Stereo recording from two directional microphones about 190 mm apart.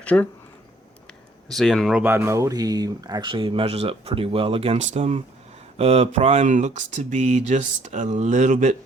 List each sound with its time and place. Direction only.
0.0 s speech: 5° left (ahead or behind)
1.5 s speech: centre (ahead or behind); by 8.7 s 40° right (ahead or behind)